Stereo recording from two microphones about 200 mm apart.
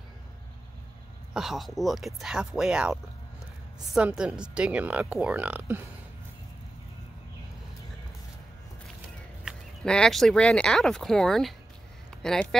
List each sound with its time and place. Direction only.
1.3 s speech: centre (ahead or behind)
9.4 s speech: centre (ahead or behind)
12.1 s a sound: 5° left (ahead or behind)